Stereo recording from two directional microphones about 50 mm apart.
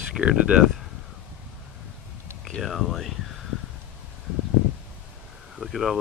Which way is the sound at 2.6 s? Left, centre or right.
Centre.